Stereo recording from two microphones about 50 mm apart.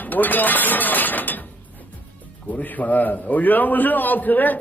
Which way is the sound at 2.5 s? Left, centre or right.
Left.